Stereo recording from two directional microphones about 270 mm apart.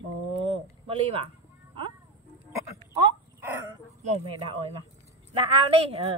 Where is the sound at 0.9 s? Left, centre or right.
Right.